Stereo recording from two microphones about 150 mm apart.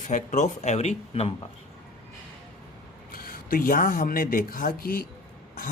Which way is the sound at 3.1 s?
70° left (ahead or behind).